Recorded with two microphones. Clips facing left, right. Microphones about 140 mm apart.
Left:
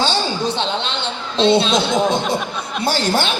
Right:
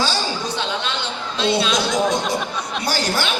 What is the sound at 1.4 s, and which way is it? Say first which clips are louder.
Speech: left 5 dB; 25° left (ahead or behind).